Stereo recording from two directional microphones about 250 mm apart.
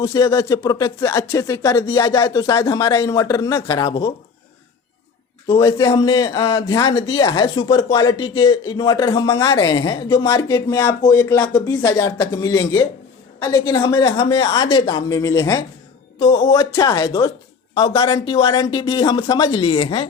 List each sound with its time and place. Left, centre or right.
0.0 s speech: centre
5.5 s speech: centre